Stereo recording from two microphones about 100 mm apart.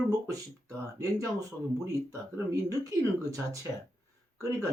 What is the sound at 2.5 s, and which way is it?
Speech, 35° right (ahead or behind).